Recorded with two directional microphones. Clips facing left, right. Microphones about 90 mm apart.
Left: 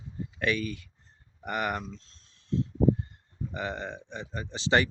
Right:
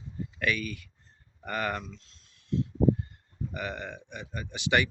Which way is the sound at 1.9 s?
35° left (ahead or behind).